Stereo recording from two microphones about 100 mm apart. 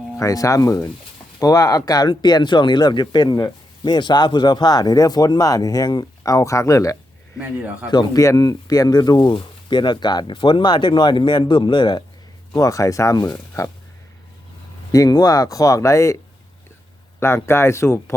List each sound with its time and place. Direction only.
0.2 s speech: 35° left (ahead or behind)
7.3 s speech: 15° right (ahead or behind)
7.9 s speech: 45° left (ahead or behind)
9.3 s speech: 55° left (ahead or behind)
12.5 s speech: 35° left (ahead or behind)
14.9 s speech: 40° left (ahead or behind)
17.2 s speech: 25° left (ahead or behind)